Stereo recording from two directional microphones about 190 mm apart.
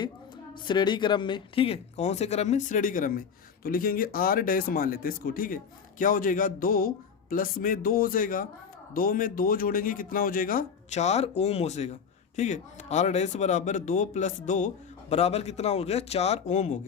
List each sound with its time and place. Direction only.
0.6 s speech: 25° left (ahead or behind)